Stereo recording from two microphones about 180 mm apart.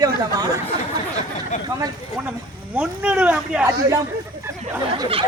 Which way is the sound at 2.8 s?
5° right (ahead or behind).